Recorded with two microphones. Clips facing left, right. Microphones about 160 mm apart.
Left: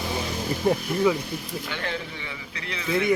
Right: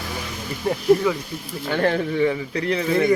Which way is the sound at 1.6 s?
50° right (ahead or behind).